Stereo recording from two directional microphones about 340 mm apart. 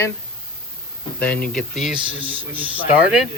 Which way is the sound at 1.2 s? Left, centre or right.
Centre.